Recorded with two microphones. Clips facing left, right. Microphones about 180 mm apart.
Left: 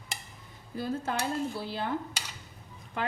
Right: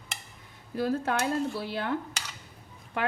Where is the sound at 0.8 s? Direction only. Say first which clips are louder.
Right 4 dB; 65° right (ahead or behind).